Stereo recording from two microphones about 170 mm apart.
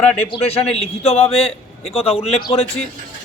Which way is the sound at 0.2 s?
35° left (ahead or behind).